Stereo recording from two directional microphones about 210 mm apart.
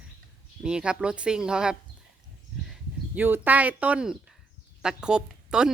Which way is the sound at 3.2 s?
10° right (ahead or behind).